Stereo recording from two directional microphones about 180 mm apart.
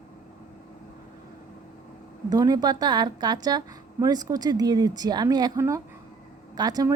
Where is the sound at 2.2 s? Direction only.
20° right (ahead or behind).